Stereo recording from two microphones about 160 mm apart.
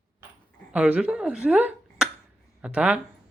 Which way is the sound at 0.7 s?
5° right (ahead or behind).